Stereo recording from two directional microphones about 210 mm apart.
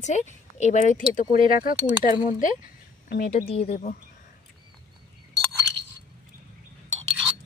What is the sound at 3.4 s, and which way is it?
Speech, 30° left (ahead or behind).